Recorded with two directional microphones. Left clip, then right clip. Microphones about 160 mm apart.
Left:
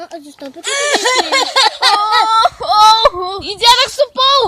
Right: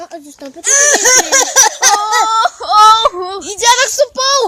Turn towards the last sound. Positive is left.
turn(degrees=-15)  # may be behind; listen again after turning